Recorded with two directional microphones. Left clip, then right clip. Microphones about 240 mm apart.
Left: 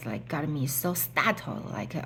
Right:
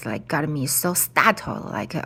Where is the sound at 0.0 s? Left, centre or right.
Right.